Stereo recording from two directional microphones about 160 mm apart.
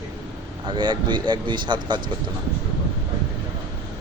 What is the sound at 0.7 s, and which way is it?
Speech, 30° right (ahead or behind).